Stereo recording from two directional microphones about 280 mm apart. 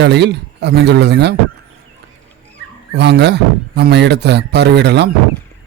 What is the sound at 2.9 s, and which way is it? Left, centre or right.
Speech, right.